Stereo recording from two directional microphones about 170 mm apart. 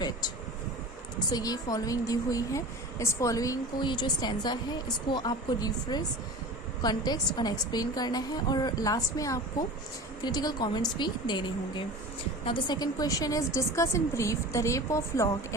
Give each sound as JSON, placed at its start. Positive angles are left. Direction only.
{"t": 1.3, "sound": "a woman's voice", "side_deg": 20}